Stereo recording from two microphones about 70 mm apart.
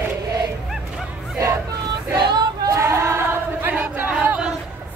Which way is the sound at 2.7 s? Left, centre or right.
Right.